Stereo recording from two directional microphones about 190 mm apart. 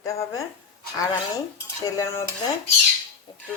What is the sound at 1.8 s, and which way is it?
Speech, 15° left (ahead or behind).